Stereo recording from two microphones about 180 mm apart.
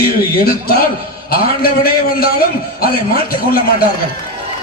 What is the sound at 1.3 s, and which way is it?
A man's voice, 55° left (ahead or behind).